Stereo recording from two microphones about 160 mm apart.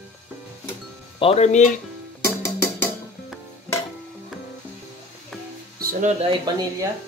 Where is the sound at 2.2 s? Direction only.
15° left (ahead or behind).